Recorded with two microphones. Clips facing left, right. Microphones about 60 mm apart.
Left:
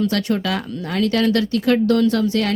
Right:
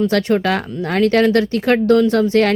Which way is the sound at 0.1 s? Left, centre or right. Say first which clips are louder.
Right 5 dB; right.